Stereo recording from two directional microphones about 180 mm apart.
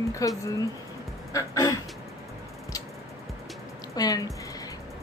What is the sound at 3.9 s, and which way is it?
Music, 20° left (ahead or behind).